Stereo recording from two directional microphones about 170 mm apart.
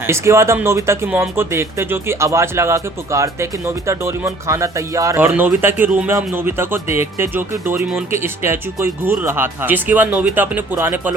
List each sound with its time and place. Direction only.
0.1 s speech: 15° right (ahead or behind)